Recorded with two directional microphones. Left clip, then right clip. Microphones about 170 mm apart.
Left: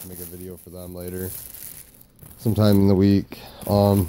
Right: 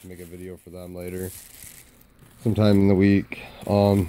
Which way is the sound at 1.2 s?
60° left (ahead or behind).